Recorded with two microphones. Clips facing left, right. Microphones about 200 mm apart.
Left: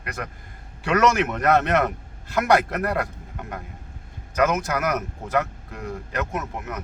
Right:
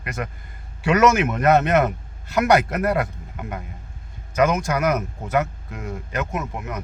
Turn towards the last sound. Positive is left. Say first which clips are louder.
# right 2 dB
turn(degrees=0)  # may be behind; listen again after turning